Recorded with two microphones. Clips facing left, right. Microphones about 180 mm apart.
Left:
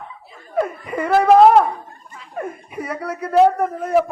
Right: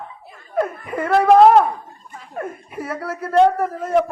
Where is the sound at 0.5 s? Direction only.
Centre (ahead or behind).